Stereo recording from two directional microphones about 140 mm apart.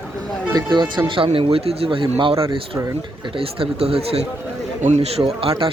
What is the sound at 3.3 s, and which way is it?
Speech, 40° right (ahead or behind).